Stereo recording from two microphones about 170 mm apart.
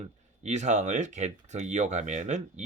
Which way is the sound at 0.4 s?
45° right (ahead or behind).